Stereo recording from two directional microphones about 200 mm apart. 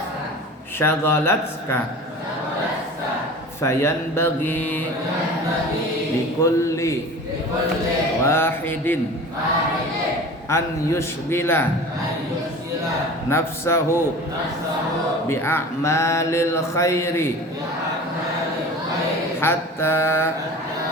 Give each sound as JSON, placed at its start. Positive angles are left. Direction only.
{"t": 0.8, "sound": "speech", "side_deg": 10}
{"t": 3.6, "sound": "speech", "side_deg": 15}
{"t": 6.4, "sound": "speech", "side_deg": 15}
{"t": 8.3, "sound": "speech", "side_deg": 10}
{"t": 10.5, "sound": "speech", "side_deg": 15}
{"t": 13.3, "sound": "speech", "side_deg": 10}
{"t": 15.3, "sound": "speech", "side_deg": 10}
{"t": 19.4, "sound": "mantra", "side_deg": 10}